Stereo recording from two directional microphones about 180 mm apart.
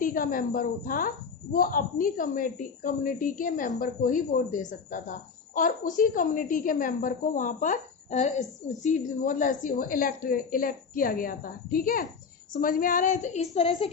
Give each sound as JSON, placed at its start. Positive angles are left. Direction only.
{"t": 0.0, "sound": "a woman's voice", "side_deg": 50}